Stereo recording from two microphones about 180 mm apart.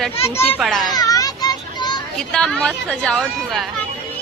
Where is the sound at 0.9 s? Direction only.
20° left (ahead or behind).